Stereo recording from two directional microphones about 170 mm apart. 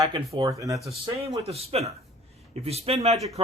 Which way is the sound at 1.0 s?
35° right (ahead or behind).